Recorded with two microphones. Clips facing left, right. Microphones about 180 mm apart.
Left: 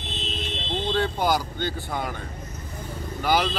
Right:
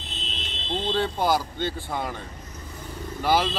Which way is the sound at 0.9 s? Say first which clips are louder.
Even; centre (ahead or behind).